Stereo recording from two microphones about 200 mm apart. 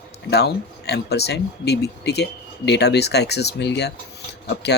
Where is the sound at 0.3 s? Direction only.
55° left (ahead or behind).